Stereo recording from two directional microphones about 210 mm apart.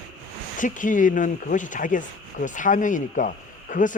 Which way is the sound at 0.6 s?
40° left (ahead or behind).